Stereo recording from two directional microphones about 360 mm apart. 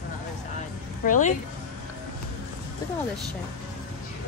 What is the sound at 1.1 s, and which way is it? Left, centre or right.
Speech, left.